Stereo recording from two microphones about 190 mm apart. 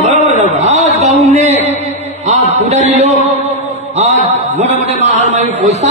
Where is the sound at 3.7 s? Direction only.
35° right (ahead or behind).